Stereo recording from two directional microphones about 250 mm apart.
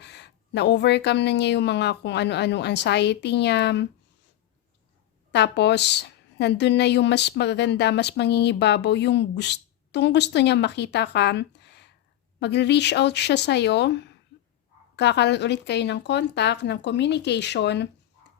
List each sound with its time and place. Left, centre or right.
0.0 s a woman's voice: left
5.3 s a woman's voice: left